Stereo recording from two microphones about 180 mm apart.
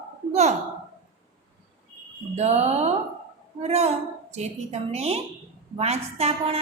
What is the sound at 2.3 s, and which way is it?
A woman's voice, 40° right (ahead or behind).